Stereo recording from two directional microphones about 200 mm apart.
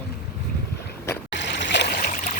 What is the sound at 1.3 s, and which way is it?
Stream, 60° left (ahead or behind).